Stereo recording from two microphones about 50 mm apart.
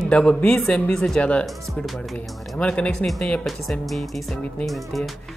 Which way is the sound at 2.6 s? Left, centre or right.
Left.